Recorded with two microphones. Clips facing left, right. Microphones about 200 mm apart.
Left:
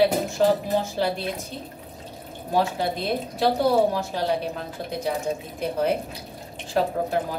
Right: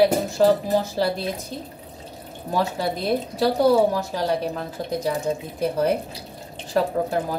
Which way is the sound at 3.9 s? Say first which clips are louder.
Right 1 dB; 40° right (ahead or behind).